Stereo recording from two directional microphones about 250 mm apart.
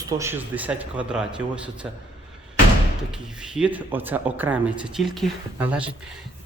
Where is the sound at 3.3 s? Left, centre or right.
Centre.